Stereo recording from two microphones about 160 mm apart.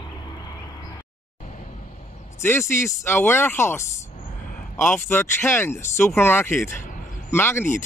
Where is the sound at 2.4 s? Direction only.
15° left (ahead or behind).